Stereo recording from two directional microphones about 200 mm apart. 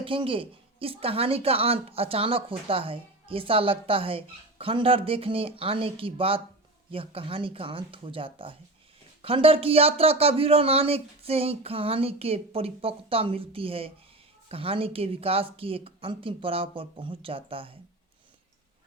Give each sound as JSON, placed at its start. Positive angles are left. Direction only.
{"t": 0.0, "sound": "a woman's voice", "side_deg": -25}